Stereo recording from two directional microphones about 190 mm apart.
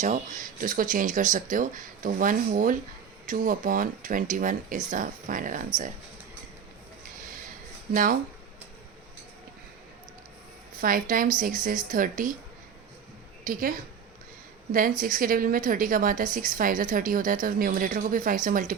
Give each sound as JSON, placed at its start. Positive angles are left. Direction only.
{"t": 0.0, "sound": "a woman's voice", "side_deg": -40}
{"t": 7.2, "sound": "a sound", "side_deg": -45}
{"t": 7.9, "sound": "a woman's voice", "side_deg": -45}
{"t": 10.8, "sound": "a woman's voice", "side_deg": -45}
{"t": 13.4, "sound": "a woman's voice", "side_deg": -45}